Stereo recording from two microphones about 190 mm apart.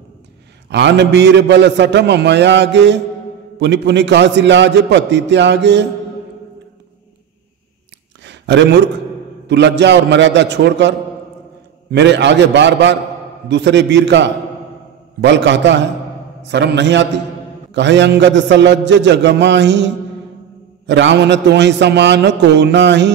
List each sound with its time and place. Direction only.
0.7 s a man's voice: 65° right (ahead or behind)
8.2 s a sound: 70° right (ahead or behind)
9.5 s a man's voice: 65° right (ahead or behind)